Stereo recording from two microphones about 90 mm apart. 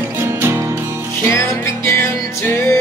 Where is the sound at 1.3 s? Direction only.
35° left (ahead or behind).